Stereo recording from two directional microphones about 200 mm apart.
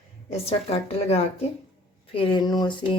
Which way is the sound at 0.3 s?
30° left (ahead or behind).